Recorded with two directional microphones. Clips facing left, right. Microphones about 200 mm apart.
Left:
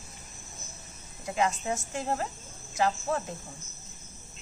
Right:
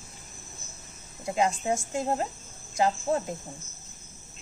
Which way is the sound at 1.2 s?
25° right (ahead or behind).